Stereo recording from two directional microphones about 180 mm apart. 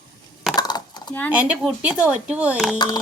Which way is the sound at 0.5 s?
20° left (ahead or behind).